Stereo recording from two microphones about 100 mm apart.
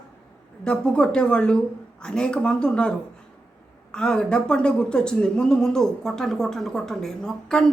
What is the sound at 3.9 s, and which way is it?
Speech, 10° left (ahead or behind).